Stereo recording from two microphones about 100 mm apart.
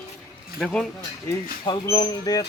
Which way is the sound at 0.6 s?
5° left (ahead or behind).